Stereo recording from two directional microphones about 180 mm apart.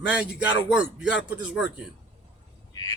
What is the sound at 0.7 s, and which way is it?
Speech, 5° right (ahead or behind).